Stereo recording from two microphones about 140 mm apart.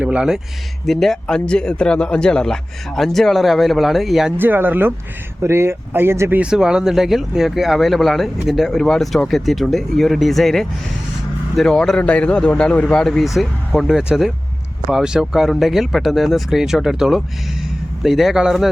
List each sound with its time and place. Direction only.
0.0 s speech: 5° right (ahead or behind)
4.4 s speech: 15° right (ahead or behind)
6.4 s speech: 5° right (ahead or behind)